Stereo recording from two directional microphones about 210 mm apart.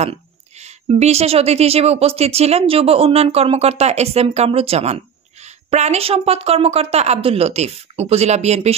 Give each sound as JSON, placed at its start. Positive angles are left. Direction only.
{"t": 0.0, "sound": "a woman's voice", "side_deg": -30}